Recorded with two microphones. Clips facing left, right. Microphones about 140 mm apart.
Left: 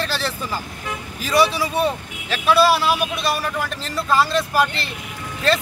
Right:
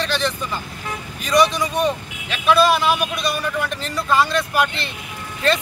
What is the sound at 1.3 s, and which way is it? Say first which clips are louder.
A man's voice: right 1 dB; 5° left (ahead or behind).